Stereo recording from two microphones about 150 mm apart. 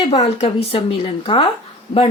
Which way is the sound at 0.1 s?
40° left (ahead or behind).